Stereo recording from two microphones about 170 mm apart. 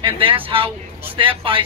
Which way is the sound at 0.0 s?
30° right (ahead or behind).